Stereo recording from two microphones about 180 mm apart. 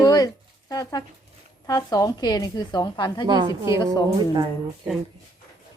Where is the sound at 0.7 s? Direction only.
20° left (ahead or behind).